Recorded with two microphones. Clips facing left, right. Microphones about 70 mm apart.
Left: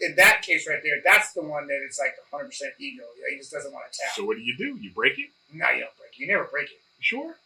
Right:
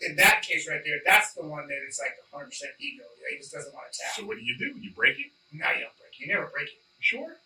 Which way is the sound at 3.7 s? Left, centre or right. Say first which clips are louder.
Left 5 dB; left.